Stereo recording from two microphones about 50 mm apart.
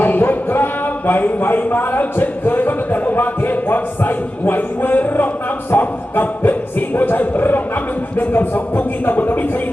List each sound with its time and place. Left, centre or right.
0.0 s speech: left